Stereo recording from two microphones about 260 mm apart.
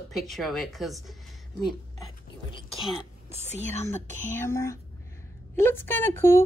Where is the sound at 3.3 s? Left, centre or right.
Right.